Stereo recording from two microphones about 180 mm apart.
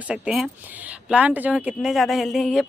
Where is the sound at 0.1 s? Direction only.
5° right (ahead or behind).